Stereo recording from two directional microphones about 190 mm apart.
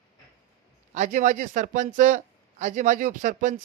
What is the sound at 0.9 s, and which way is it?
A man's voice, 40° right (ahead or behind).